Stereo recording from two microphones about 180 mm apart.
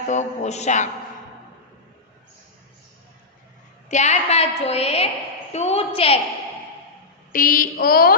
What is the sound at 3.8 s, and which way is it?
A woman's voice, 40° left (ahead or behind).